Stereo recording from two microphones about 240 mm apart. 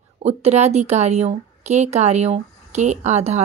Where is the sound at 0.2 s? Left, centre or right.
Right.